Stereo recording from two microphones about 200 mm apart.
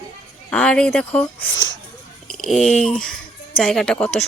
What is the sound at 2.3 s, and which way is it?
Speech, centre (ahead or behind).